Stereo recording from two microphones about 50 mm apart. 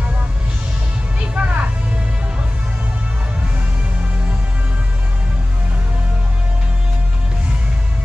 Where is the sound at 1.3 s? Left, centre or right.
Right.